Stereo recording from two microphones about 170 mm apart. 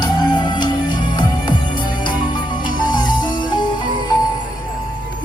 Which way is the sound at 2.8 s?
25° left (ahead or behind).